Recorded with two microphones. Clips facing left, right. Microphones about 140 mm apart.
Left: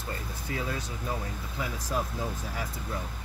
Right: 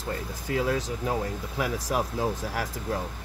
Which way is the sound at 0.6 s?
85° right.